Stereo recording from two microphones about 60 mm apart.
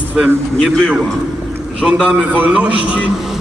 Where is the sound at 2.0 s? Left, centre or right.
Right.